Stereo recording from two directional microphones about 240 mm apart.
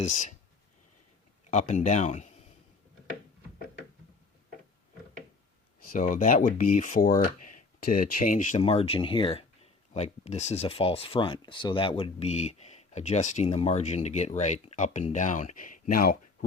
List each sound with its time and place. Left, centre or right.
0.0 s speech: left
1.5 s speech: left
5.9 s speech: left